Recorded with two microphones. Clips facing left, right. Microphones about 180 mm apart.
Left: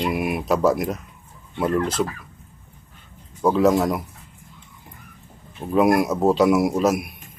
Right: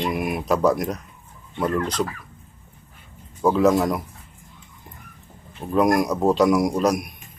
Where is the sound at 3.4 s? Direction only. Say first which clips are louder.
Even; centre (ahead or behind).